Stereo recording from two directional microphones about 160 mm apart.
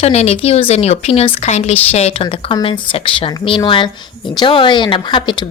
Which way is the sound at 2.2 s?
30° left (ahead or behind).